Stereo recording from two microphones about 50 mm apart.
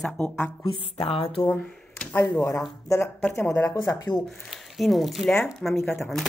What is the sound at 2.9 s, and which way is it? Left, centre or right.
Speech, left.